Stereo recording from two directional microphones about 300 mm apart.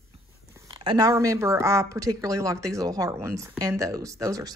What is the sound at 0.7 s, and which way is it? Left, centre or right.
Speech, centre.